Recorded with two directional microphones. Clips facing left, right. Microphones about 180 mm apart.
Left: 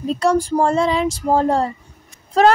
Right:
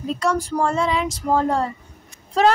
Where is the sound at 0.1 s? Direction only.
35° left (ahead or behind).